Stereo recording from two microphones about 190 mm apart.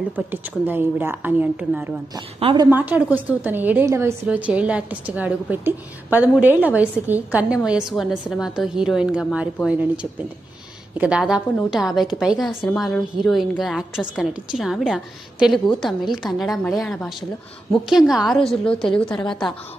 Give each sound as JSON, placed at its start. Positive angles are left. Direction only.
{"t": 0.1, "sound": "a woman's voice", "side_deg": -10}
{"t": 2.4, "sound": "a woman's voice", "side_deg": -20}
{"t": 2.7, "sound": "a woman's voice", "side_deg": -10}
{"t": 11.0, "sound": "a woman's voice", "side_deg": -5}